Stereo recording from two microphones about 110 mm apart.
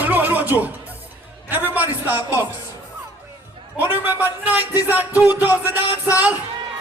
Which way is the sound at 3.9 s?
15° right (ahead or behind).